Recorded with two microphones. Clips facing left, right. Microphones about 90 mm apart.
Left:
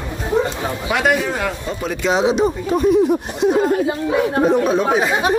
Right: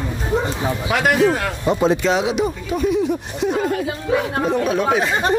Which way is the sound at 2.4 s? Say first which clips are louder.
Left 4 dB; 40° left (ahead or behind).